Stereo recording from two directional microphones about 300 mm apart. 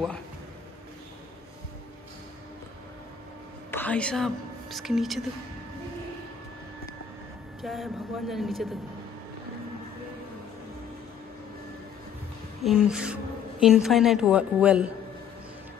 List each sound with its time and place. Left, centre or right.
3.7 s a woman's voice: centre
7.6 s a woman's voice: centre
12.6 s a woman's voice: centre